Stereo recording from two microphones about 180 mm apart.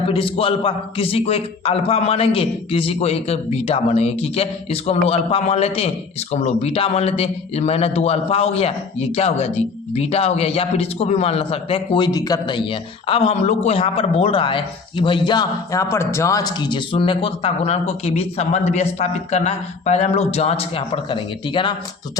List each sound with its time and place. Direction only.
0.1 s a man's voice: 30° left (ahead or behind)